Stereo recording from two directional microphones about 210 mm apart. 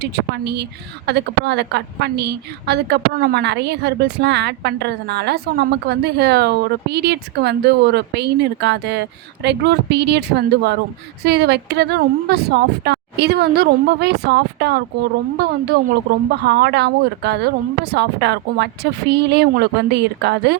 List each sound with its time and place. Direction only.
0.0 s a woman's voice: 50° right (ahead or behind)